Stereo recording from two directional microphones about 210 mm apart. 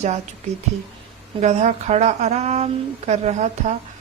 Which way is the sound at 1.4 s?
35° right (ahead or behind).